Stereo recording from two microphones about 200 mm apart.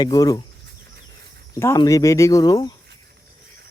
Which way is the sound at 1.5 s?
15° left (ahead or behind).